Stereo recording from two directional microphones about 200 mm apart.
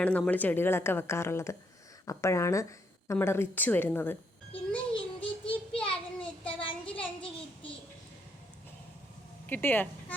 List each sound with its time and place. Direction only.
0.0 s speech: 5° left (ahead or behind)
4.7 s music: 25° left (ahead or behind)
5.5 s child singing: 5° left (ahead or behind)
6.1 s child singing: 25° left (ahead or behind)
7.0 s a sound: 25° left (ahead or behind)
9.5 s speech: 10° left (ahead or behind)